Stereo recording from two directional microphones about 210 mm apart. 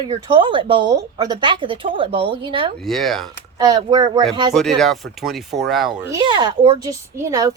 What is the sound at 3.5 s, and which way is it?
Speech, 20° right (ahead or behind).